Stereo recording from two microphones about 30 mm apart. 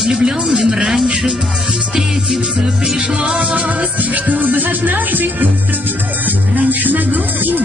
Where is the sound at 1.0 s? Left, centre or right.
Right.